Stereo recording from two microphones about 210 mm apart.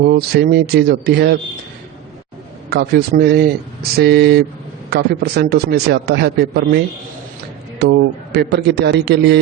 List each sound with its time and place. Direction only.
0.0 s a man's voice: 50° right (ahead or behind)
2.6 s a man's voice: 50° right (ahead or behind)